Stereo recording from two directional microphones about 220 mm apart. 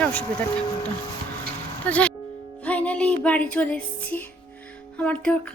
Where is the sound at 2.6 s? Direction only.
5° left (ahead or behind).